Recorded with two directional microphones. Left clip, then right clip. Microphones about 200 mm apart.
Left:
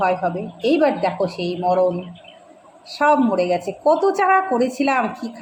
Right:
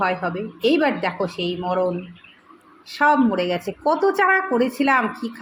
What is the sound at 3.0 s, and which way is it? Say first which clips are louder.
A woman's voice: left 1 dB; 10° right (ahead or behind).